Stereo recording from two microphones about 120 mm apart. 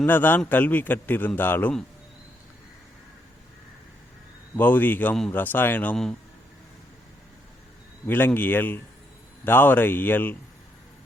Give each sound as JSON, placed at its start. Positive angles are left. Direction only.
{"t": 0.0, "sound": "a man's voice", "side_deg": 15}
{"t": 4.5, "sound": "a man's voice", "side_deg": 15}
{"t": 8.0, "sound": "a man's voice", "side_deg": 15}